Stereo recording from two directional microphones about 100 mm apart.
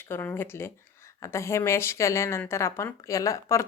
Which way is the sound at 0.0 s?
20° left (ahead or behind).